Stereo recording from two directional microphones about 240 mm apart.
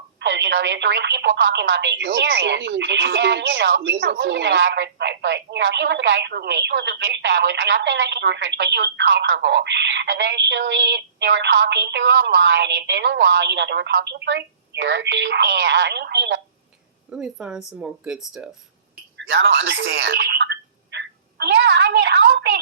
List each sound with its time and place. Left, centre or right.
0.2 s speech: right
17.1 s speech: centre
19.1 s speech: right